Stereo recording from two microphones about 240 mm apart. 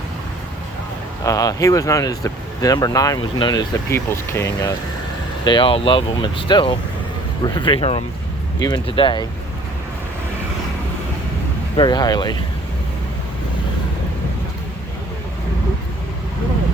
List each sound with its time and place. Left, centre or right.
1.2 s speech: centre
11.8 s speech: centre